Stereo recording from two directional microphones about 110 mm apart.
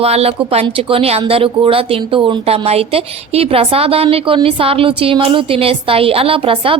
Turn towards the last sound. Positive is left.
turn(degrees=-55)  # may be behind; listen again after turning